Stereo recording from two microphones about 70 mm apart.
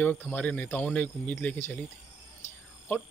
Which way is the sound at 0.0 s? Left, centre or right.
Left.